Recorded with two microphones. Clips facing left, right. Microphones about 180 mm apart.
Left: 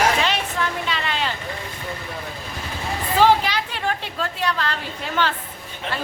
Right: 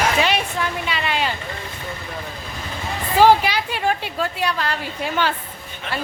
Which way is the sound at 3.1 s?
10° right (ahead or behind).